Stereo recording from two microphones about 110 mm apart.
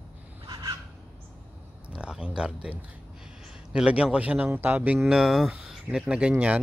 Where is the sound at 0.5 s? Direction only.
40° right (ahead or behind).